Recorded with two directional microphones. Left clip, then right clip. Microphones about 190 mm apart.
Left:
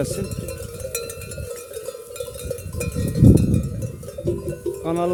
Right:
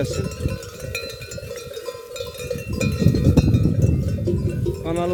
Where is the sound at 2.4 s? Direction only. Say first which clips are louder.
Right 3 dB; 60° left (ahead or behind).